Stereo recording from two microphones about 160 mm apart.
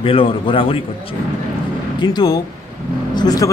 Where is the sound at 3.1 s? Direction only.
25° left (ahead or behind).